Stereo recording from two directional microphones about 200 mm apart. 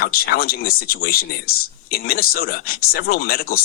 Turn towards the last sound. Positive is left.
turn(degrees=50)  # may be behind; listen again after turning